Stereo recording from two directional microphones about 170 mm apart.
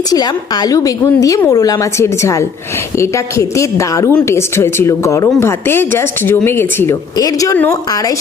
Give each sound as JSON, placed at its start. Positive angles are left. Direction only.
{"t": 0.1, "sound": "a woman's voice", "side_deg": 25}